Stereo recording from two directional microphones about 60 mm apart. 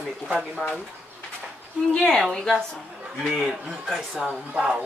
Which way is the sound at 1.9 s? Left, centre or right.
Centre.